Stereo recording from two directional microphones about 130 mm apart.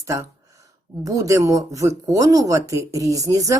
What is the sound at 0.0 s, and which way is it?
Speech, 25° right (ahead or behind).